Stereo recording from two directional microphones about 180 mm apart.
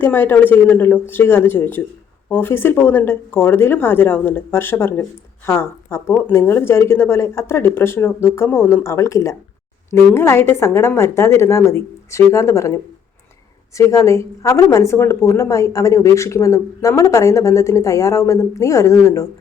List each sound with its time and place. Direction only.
0.0 s speech: 10° left (ahead or behind)